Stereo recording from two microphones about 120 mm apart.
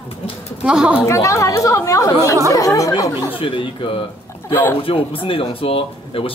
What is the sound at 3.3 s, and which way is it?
Speech, 45° left (ahead or behind).